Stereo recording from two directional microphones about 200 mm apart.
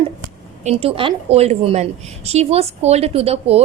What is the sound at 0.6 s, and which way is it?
A woman's voice, 30° right (ahead or behind).